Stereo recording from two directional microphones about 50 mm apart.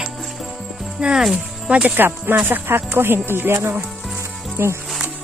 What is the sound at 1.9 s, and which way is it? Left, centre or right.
Speech, right.